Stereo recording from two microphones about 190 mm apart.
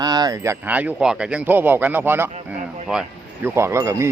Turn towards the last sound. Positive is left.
turn(degrees=-15)  # may be behind; listen again after turning